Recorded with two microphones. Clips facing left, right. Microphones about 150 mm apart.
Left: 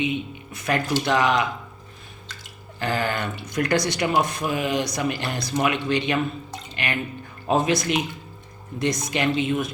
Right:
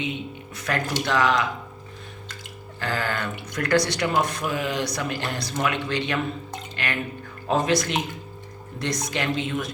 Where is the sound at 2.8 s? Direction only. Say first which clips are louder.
Left 2 dB; 15° left (ahead or behind).